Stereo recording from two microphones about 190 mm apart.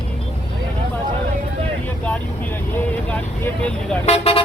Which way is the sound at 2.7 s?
10° left (ahead or behind).